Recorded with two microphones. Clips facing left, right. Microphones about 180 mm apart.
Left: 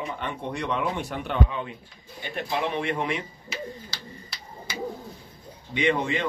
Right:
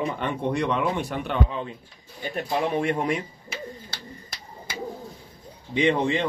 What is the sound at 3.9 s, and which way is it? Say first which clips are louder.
Bird: right 1 dB; 50° right (ahead or behind).